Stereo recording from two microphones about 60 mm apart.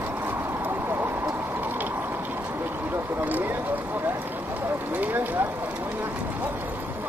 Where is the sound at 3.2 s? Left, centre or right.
Right.